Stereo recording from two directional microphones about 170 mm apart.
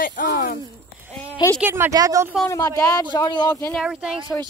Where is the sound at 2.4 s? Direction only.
20° left (ahead or behind).